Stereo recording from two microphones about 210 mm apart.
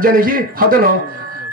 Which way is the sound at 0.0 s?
40° right (ahead or behind).